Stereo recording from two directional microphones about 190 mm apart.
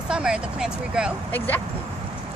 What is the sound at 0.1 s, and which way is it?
Speech, 5° right (ahead or behind).